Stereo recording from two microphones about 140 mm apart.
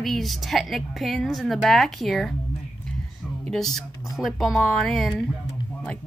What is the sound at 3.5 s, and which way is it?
A woman's voice, centre (ahead or behind).